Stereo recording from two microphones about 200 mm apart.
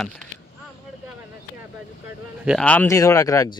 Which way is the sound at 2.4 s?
Centre (ahead or behind).